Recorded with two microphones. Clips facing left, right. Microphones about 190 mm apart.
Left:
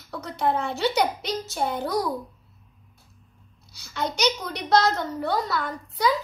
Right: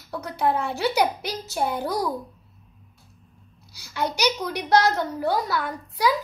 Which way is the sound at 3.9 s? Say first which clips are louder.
Right 1 dB; 10° right (ahead or behind).